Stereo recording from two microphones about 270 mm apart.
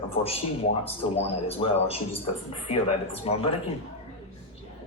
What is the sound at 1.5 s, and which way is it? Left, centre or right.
Speech, left.